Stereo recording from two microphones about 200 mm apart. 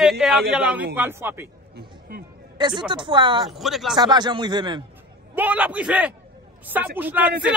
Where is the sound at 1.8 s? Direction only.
50° right (ahead or behind).